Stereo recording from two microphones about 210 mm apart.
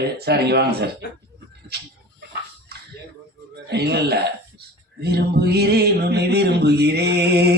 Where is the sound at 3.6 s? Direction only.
50° right (ahead or behind).